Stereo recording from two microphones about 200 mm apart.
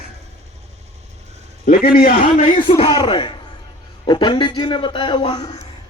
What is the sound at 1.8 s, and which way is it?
Speech, 45° left (ahead or behind).